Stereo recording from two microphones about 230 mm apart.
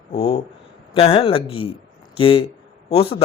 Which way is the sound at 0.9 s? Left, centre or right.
Left.